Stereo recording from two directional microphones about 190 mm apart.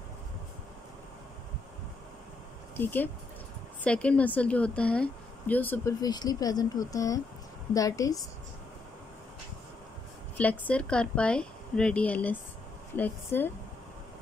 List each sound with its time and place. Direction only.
2.7 s a woman's voice: 10° left (ahead or behind)
5.9 s a woman's voice: 20° left (ahead or behind)
10.3 s a woman's voice: 10° left (ahead or behind)